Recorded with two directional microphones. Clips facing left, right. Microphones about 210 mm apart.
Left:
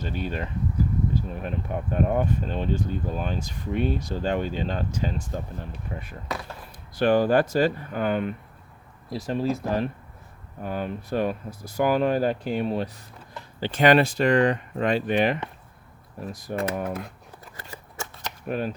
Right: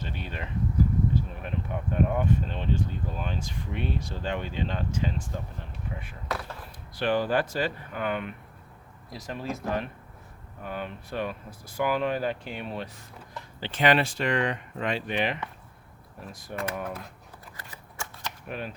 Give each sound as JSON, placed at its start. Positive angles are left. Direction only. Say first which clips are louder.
{"t": 0.0, "sound": "speech", "louder": "left 7 dB", "side_deg": 40}
{"t": 6.9, "sound": "speech", "louder": "left 6 dB", "side_deg": 45}
{"t": 17.6, "sound": "shuffling cards", "louder": "left 5 dB", "side_deg": 25}
{"t": 18.4, "sound": "speech", "louder": "left 9 dB", "side_deg": 40}